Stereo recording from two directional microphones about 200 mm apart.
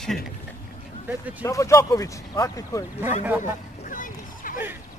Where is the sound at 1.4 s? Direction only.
15° left (ahead or behind).